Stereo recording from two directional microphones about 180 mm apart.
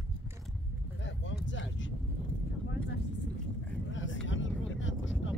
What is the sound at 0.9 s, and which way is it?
Vehicle, 90° left.